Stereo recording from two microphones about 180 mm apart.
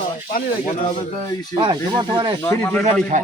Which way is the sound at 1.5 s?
25° right (ahead or behind).